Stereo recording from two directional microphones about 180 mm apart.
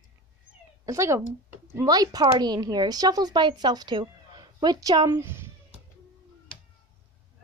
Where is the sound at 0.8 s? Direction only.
15° right (ahead or behind).